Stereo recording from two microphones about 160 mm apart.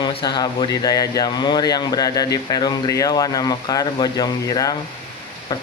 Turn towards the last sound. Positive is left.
turn(degrees=25)  # may be behind; listen again after turning